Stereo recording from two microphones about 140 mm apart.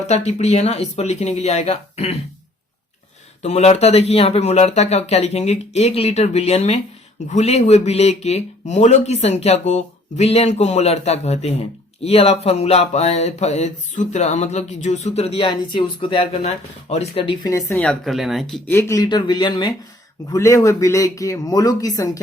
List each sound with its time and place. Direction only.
0.1 s speech: 55° left (ahead or behind)
3.4 s speech: 50° left (ahead or behind)
17.4 s speech: 20° left (ahead or behind)
18.0 s speech: centre (ahead or behind)
18.6 s speech: 15° left (ahead or behind)